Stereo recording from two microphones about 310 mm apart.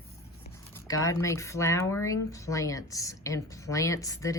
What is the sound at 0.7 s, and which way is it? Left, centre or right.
Speech, centre.